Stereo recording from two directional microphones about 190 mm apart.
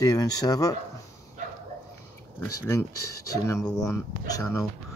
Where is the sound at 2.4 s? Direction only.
15° left (ahead or behind).